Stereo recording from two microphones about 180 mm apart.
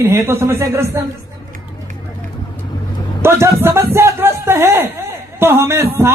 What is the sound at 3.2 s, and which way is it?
Speech, 15° right (ahead or behind).